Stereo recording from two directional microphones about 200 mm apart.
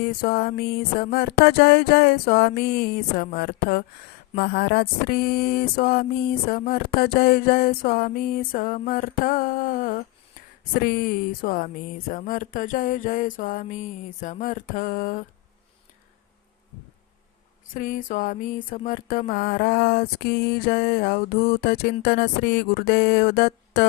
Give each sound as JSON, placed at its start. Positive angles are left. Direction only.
{"t": 0.0, "sound": "mantra", "side_deg": 50}
{"t": 17.7, "sound": "mantra", "side_deg": 45}